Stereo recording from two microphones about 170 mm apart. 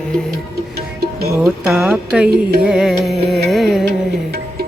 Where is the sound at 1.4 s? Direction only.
5° right (ahead or behind).